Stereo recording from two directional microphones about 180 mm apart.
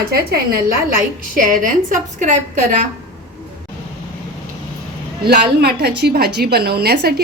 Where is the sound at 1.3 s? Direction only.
45° right (ahead or behind).